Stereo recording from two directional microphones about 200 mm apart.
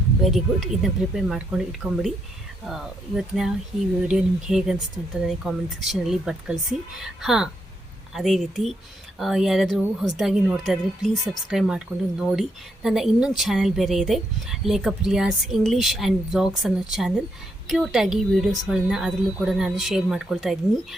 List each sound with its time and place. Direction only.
0.3 s a woman's voice: centre (ahead or behind)